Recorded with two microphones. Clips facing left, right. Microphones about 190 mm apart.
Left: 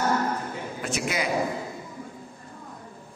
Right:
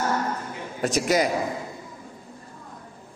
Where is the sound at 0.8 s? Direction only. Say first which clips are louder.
Right 7 dB; 40° right (ahead or behind).